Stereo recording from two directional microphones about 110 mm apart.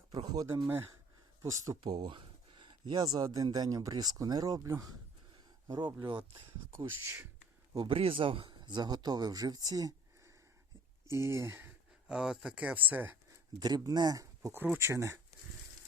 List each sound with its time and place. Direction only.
0.3 s speech: 35° right (ahead or behind)
1.8 s speech: 40° right (ahead or behind)
5.6 s speech: 40° right (ahead or behind)
6.7 s speech: 25° right (ahead or behind)
7.9 s speech: 55° right (ahead or behind); by 11.7 s 20° right (ahead or behind)
12.0 s speech: 5° right (ahead or behind)
13.6 s speech: 40° right (ahead or behind)
14.5 s speech: 20° right (ahead or behind)